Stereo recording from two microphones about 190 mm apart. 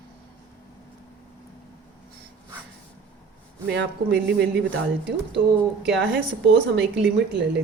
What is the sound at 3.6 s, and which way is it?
Speech, 65° right (ahead or behind).